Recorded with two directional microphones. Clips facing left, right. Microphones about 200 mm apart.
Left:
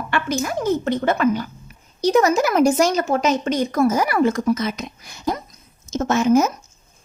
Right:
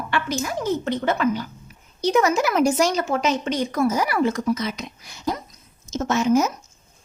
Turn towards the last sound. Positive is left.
turn(degrees=50)  # may be behind; listen again after turning